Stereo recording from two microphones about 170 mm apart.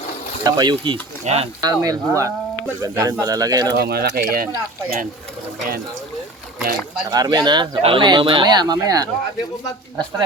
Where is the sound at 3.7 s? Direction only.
65° right (ahead or behind).